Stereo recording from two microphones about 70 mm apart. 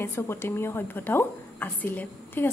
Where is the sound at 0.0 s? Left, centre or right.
Left.